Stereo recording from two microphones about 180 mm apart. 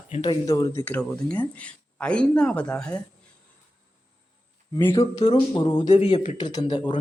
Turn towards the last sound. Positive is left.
turn(degrees=25)  # may be behind; listen again after turning